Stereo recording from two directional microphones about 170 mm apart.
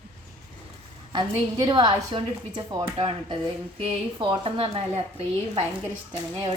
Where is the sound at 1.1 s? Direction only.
25° right (ahead or behind).